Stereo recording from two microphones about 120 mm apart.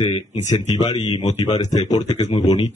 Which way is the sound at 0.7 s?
40° left (ahead or behind).